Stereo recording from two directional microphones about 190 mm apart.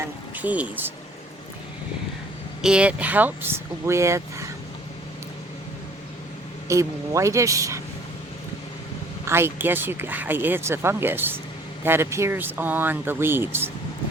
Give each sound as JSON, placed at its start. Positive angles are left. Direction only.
{"t": 0.3, "sound": "a woman's voice", "side_deg": -10}
{"t": 2.6, "sound": "a woman's voice", "side_deg": -5}
{"t": 6.7, "sound": "a woman's voice", "side_deg": -15}
{"t": 9.2, "sound": "a woman's voice", "side_deg": -10}